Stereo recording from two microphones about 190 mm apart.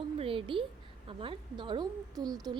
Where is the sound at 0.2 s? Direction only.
30° right (ahead or behind).